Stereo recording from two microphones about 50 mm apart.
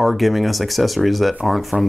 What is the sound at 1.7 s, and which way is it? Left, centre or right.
Speech, right.